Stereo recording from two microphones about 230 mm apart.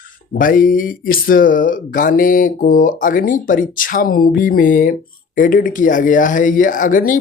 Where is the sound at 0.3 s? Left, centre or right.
Left.